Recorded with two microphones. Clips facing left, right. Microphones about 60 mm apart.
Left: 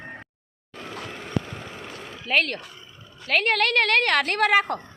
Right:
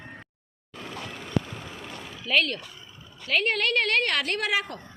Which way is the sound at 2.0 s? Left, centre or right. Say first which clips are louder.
Left 1 dB; left.